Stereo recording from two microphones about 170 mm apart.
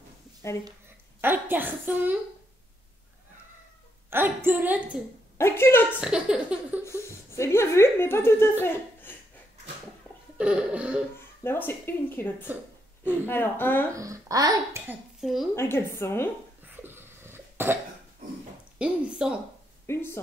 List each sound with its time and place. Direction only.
1.2 s a child's voice: 10° right (ahead or behind)
4.1 s a child's voice: 15° right (ahead or behind)
5.4 s speech: 15° left (ahead or behind)
5.9 s speech: 5° right (ahead or behind)
6.8 s speech: 15° left (ahead or behind)
10.3 s a child's voice: 5° right (ahead or behind)
11.1 s speech: 10° left (ahead or behind)
13.9 s speech: 20° right (ahead or behind)
15.1 s speech: centre (ahead or behind)
15.5 s speech: 15° left (ahead or behind)
16.6 s cough: 10° right (ahead or behind)
18.8 s speech: 5° right (ahead or behind)
19.9 s speech: 15° left (ahead or behind)